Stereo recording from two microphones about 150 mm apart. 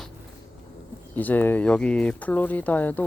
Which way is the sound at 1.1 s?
10° left (ahead or behind).